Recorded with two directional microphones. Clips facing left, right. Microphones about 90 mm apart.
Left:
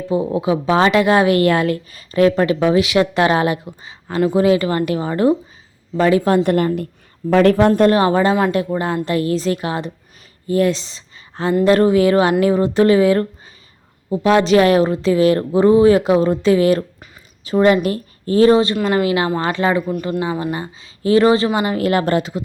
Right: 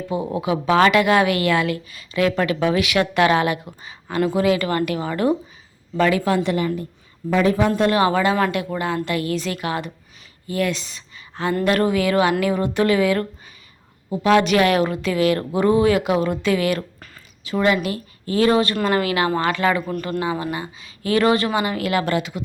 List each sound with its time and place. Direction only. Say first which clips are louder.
0.3 s a woman's voice: even; 25° left (ahead or behind); by 6.8 s 50° left (ahead or behind)
7.3 s speech: left 6 dB; 65° left (ahead or behind)
7.7 s speech: left 5 dB; 35° left (ahead or behind)
8.7 s a woman's voice: left 4 dB; 25° left (ahead or behind)
9.0 s a woman's voice: left 5 dB; 35° left (ahead or behind)
19.8 s a woman's voice: left 3 dB; 15° left (ahead or behind); by 22.4 s 35° left (ahead or behind)